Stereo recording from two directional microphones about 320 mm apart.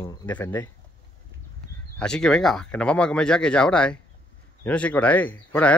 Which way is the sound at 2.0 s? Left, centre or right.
Centre.